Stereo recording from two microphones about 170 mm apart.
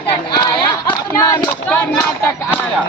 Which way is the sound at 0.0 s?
25° left (ahead or behind).